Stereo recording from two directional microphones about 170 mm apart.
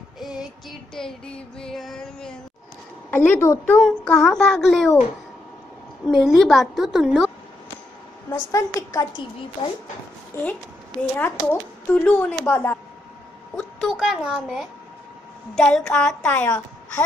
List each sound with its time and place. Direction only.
0.2 s music: centre (ahead or behind)
6.0 s music: centre (ahead or behind)
8.3 s speech: 20° left (ahead or behind)
10.3 s speech: 15° left (ahead or behind)
13.6 s a woman's voice: centre (ahead or behind)
15.5 s music: 5° left (ahead or behind)